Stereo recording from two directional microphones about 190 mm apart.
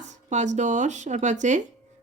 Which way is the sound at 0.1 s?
40° right (ahead or behind).